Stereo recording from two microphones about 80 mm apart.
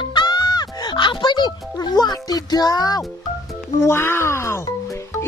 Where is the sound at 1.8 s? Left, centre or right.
Left.